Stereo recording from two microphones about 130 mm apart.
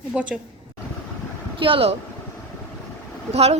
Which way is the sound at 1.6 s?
45° right (ahead or behind).